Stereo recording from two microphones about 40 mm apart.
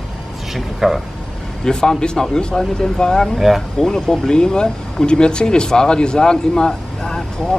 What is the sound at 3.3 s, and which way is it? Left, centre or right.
Speech, centre.